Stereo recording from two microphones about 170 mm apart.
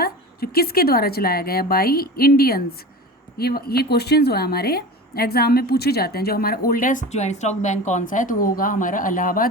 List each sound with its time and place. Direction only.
0.0 s a woman's voice: 65° left (ahead or behind)